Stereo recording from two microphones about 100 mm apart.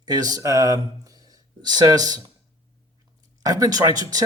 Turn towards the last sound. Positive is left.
turn(degrees=-40)  # may be behind; listen again after turning